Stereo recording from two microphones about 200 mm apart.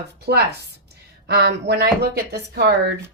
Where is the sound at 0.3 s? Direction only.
50° right (ahead or behind).